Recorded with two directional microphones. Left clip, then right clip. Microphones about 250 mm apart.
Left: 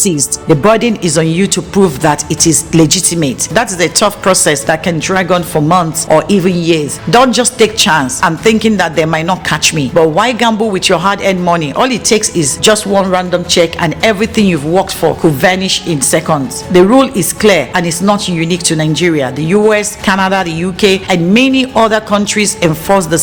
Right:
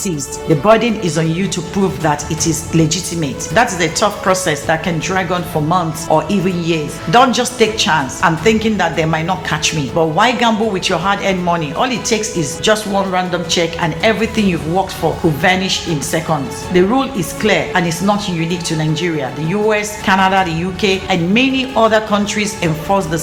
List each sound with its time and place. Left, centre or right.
0.6 s speech: left